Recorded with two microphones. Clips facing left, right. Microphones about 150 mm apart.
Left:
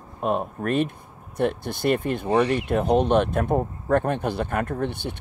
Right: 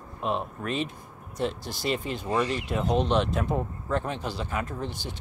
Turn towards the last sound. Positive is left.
turn(degrees=60)  # may be behind; listen again after turning